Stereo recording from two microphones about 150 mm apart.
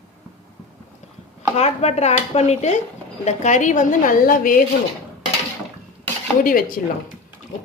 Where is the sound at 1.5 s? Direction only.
45° left (ahead or behind); by 4.6 s 70° left (ahead or behind).